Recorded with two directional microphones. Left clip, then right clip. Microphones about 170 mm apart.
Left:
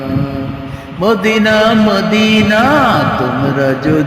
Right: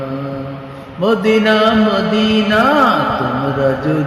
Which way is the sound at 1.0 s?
25° left (ahead or behind).